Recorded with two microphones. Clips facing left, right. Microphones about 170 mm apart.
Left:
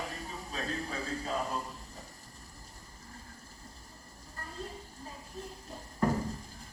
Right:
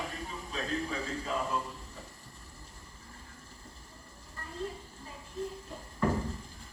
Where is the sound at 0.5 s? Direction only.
40° left (ahead or behind).